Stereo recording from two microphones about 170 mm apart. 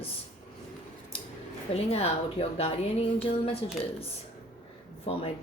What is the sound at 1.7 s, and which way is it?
Speech, 35° left (ahead or behind).